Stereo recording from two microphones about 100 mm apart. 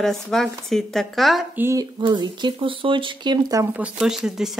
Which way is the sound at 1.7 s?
45° right (ahead or behind).